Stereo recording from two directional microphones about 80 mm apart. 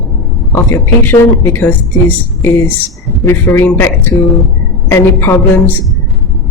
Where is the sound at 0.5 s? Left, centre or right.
Left.